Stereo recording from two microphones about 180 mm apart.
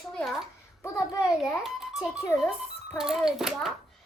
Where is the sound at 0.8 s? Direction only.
15° left (ahead or behind).